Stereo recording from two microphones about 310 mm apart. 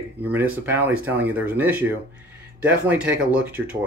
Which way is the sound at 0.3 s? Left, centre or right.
Centre.